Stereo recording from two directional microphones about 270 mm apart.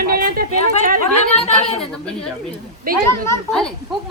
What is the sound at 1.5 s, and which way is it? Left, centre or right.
Speech, left.